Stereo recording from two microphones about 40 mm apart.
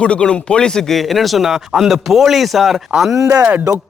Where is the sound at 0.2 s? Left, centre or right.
Centre.